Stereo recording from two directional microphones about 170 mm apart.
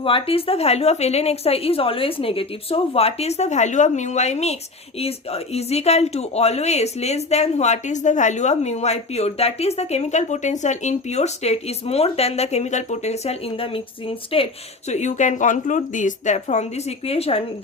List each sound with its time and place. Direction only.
0.0 s speech: 35° left (ahead or behind)